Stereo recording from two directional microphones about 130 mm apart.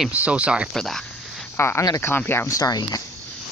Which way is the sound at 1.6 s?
20° left (ahead or behind).